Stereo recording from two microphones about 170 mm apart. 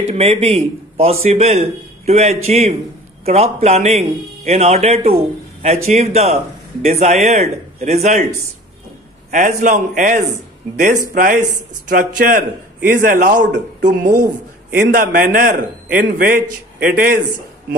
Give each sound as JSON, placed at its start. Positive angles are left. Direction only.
{"t": 0.1, "sound": "a man's voice", "side_deg": -35}
{"t": 9.3, "sound": "speech", "side_deg": -50}
{"t": 13.8, "sound": "a man's voice", "side_deg": -65}